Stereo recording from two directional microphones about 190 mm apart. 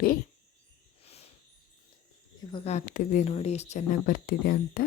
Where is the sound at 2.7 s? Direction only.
40° left (ahead or behind).